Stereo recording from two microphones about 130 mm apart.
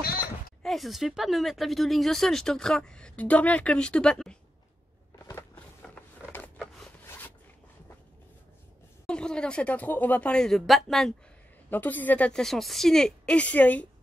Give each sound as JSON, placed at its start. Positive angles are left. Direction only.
{"t": 0.6, "sound": "speech", "side_deg": 0}
{"t": 5.2, "sound": "a sound", "side_deg": 20}
{"t": 5.9, "sound": "mechanisms", "side_deg": 15}
{"t": 7.1, "sound": "zipper", "side_deg": 15}
{"t": 9.0, "sound": "speech", "side_deg": 5}
{"t": 11.7, "sound": "speech", "side_deg": 15}